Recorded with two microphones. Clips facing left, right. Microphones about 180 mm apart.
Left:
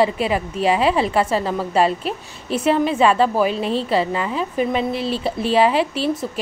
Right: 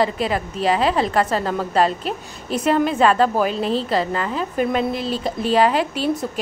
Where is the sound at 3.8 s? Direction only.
5° left (ahead or behind).